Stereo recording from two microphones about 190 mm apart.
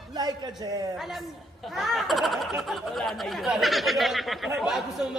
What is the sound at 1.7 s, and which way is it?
Speech, centre (ahead or behind).